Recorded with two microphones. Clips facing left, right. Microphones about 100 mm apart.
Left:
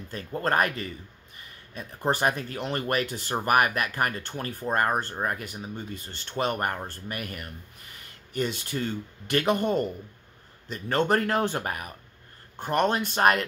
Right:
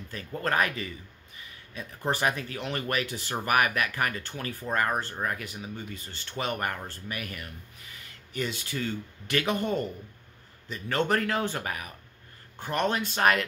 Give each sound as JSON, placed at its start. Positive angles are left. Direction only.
{"t": 0.1, "sound": "speech", "side_deg": 35}
{"t": 0.6, "sound": "a man's voice", "side_deg": 45}
{"t": 2.2, "sound": "speech", "side_deg": 40}
{"t": 4.4, "sound": "a man's voice", "side_deg": 50}
{"t": 4.7, "sound": "speech", "side_deg": 35}
{"t": 8.7, "sound": "speech", "side_deg": 30}
{"t": 9.4, "sound": "a man's voice", "side_deg": 45}
{"t": 10.7, "sound": "a man's voice", "side_deg": 45}